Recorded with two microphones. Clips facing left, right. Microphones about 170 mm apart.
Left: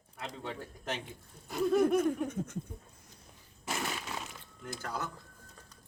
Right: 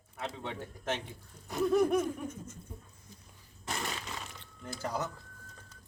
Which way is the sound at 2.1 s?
65° left (ahead or behind).